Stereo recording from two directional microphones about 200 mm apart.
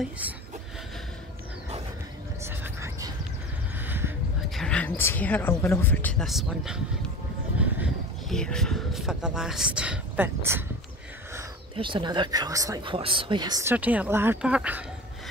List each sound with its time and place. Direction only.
2.4 s whispering: 15° right (ahead or behind)
3.7 s a sound: 10° right (ahead or behind)
4.6 s speech: 5° left (ahead or behind)
8.3 s speech: 5° left (ahead or behind)
11.7 s speech: 25° right (ahead or behind); by 14.9 s 5° right (ahead or behind)